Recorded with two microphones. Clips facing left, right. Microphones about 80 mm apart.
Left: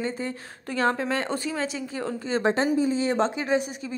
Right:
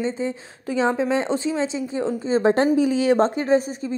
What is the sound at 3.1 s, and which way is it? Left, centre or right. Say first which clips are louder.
Speech: right 6 dB; right.